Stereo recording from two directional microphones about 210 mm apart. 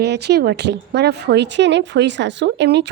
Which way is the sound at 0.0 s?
50° right (ahead or behind).